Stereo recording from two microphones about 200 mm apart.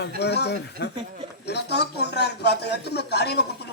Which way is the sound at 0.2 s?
55° left (ahead or behind).